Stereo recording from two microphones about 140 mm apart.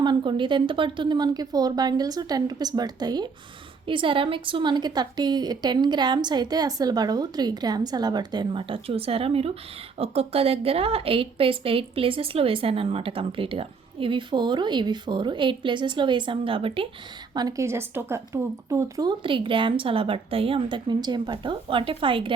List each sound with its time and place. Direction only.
0.0 s a woman's voice: 35° right (ahead or behind)
17.3 s a woman's voice: 25° right (ahead or behind)